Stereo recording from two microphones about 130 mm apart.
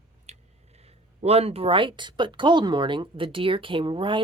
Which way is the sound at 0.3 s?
55° right (ahead or behind).